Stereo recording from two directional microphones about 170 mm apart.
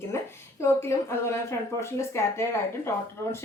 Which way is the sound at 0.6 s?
15° left (ahead or behind).